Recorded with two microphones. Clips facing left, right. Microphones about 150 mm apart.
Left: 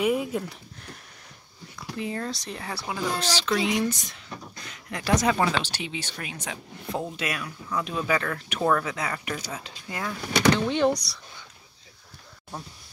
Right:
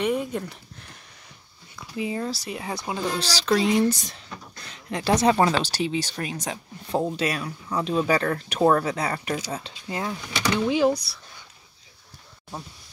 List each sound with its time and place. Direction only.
0.0 s speech: 5° left (ahead or behind)
2.0 s speech: 5° right (ahead or behind)
3.2 s speech: 35° right (ahead or behind)
10.7 s speech: 5° right (ahead or behind)